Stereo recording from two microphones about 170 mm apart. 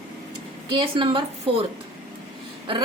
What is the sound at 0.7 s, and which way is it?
Speech, 30° right (ahead or behind).